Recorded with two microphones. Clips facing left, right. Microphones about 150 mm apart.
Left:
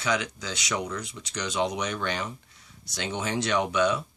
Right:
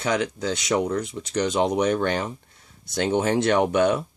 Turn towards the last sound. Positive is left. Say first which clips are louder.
# right 5 dB
turn(degrees=-50)  # may be behind; listen again after turning